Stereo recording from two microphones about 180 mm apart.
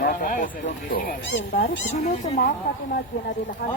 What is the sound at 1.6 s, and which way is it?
Speech, 80° left.